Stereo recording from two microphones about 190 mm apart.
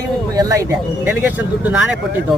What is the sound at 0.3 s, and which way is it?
Speech, 20° right (ahead or behind).